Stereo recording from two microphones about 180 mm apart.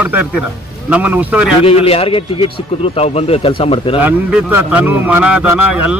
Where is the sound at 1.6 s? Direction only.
35° left (ahead or behind).